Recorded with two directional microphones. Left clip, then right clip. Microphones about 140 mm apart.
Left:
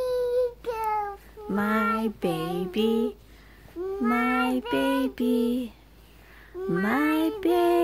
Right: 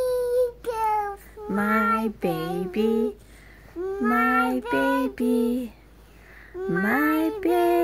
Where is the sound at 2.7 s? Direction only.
15° left (ahead or behind).